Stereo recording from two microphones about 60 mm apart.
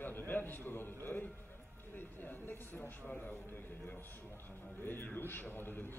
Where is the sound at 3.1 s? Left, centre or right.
Left.